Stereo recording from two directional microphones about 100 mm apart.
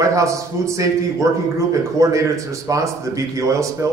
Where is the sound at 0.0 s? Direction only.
30° right (ahead or behind).